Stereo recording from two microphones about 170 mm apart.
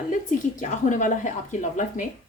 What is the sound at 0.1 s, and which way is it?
A woman's voice, 45° left (ahead or behind).